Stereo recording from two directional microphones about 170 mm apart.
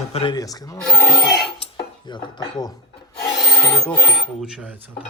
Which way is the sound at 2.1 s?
25° left (ahead or behind).